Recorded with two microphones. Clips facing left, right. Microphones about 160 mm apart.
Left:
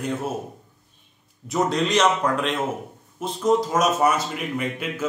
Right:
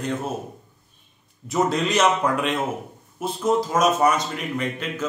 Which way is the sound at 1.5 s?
Centre (ahead or behind).